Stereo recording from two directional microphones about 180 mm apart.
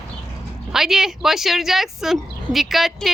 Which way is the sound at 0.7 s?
Centre (ahead or behind).